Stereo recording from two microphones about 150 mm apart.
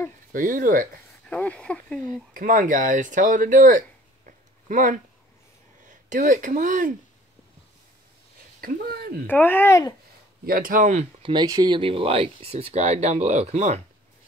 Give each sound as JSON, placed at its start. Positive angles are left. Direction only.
{"t": 0.3, "sound": "speech", "side_deg": -65}
{"t": 1.3, "sound": "a sound", "side_deg": 10}
{"t": 2.3, "sound": "speech", "side_deg": -65}
{"t": 4.3, "sound": "a sound", "side_deg": -60}
{"t": 5.9, "sound": "speech", "side_deg": -60}
{"t": 8.5, "sound": "speech", "side_deg": -80}
{"t": 9.3, "sound": "speech", "side_deg": 15}
{"t": 10.4, "sound": "speech", "side_deg": -70}
{"t": 11.2, "sound": "speech", "side_deg": -25}